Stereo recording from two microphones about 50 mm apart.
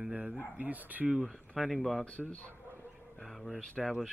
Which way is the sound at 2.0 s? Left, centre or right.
Left.